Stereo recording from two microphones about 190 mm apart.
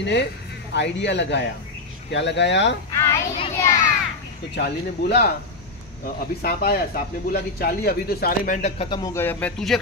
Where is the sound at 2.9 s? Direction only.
15° left (ahead or behind).